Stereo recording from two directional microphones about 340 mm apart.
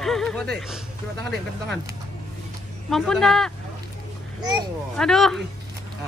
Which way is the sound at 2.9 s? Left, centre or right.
Centre.